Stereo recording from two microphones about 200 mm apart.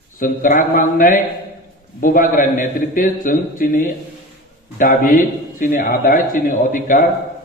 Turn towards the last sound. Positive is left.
turn(degrees=45)  # may be behind; listen again after turning